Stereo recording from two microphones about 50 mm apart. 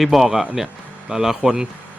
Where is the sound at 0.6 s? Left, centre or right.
Centre.